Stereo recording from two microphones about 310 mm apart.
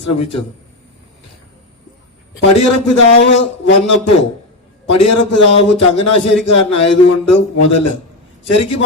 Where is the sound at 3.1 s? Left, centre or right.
Left.